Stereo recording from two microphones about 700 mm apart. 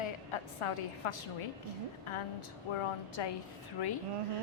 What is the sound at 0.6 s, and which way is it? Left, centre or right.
Speech, left.